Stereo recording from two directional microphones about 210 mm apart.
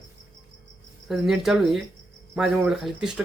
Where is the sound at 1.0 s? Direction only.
Centre (ahead or behind).